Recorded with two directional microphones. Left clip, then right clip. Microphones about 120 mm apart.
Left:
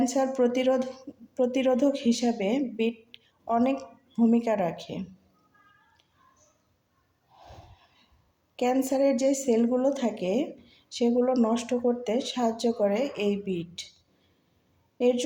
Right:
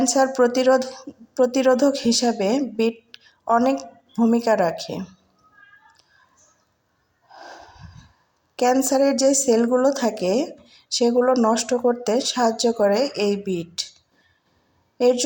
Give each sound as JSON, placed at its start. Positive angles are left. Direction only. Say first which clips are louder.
{"t": 0.0, "sound": "a woman's voice", "louder": "right 7 dB", "side_deg": -20}
{"t": 7.3, "sound": "wheeze", "louder": "right 10 dB", "side_deg": -25}
{"t": 8.5, "sound": "a woman's voice", "louder": "right 7 dB", "side_deg": -20}
{"t": 14.9, "sound": "speech", "louder": "right 6 dB", "side_deg": -25}